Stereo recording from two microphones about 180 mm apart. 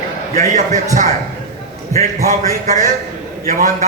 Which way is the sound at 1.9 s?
40° right (ahead or behind).